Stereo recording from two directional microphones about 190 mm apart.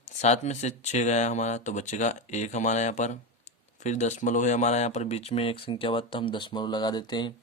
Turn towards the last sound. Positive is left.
turn(degrees=25)  # may be behind; listen again after turning